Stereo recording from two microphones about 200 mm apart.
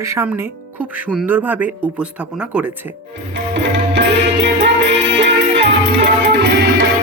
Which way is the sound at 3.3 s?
60° right (ahead or behind).